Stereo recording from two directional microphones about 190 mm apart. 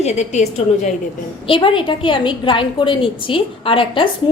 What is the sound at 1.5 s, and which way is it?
A woman's voice, 25° left (ahead or behind).